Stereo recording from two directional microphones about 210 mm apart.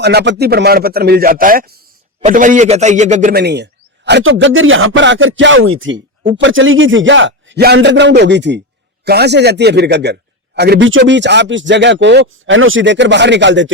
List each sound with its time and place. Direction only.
0.0 s a man's voice: 50° right (ahead or behind)
3.4 s a man's voice: 55° right (ahead or behind)